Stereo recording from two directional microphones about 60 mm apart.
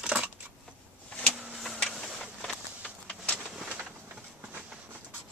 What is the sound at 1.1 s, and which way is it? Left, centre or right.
Vehicle, centre.